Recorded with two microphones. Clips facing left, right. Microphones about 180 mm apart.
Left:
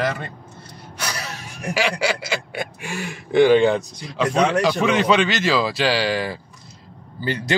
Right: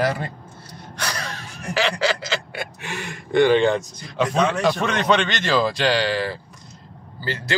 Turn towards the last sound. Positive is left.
turn(degrees=20)  # may be behind; listen again after turning